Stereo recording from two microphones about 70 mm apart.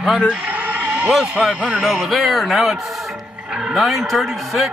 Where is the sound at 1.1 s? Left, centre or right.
Centre.